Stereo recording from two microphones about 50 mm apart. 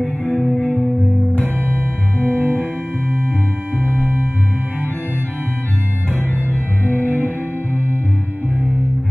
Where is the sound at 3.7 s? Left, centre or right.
Right.